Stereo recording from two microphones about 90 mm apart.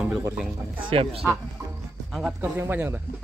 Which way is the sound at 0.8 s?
90° right.